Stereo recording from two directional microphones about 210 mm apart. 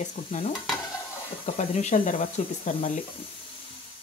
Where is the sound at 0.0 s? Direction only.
35° left (ahead or behind).